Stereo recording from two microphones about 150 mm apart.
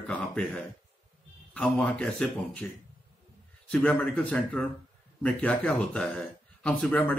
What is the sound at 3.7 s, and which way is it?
A man's voice, 10° left (ahead or behind).